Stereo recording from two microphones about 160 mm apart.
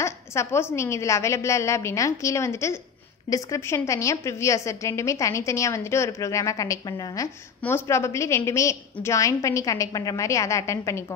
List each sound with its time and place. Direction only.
0.0 s a woman's voice: 15° left (ahead or behind)